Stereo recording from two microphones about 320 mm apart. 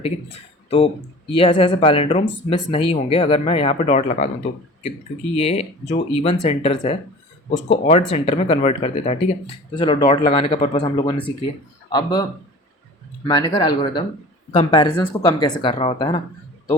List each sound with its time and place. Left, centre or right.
1.3 s speech: centre
5.4 s speech: centre
13.2 s speech: centre